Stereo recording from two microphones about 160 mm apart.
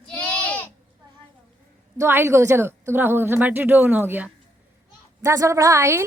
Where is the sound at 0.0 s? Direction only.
5° left (ahead or behind).